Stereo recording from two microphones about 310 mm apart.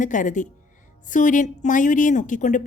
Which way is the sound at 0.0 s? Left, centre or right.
Left.